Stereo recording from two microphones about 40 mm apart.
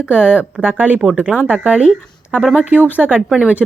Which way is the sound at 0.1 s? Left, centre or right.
Right.